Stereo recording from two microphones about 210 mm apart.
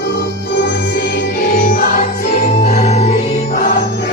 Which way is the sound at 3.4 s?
40° left (ahead or behind).